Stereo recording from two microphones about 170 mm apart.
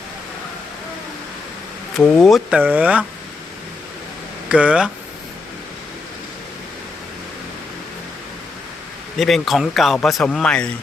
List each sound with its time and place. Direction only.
2.0 s speech: 5° left (ahead or behind)
2.6 s speech: 10° right (ahead or behind)
4.4 s speech: 5° right (ahead or behind)
9.1 s speech: centre (ahead or behind)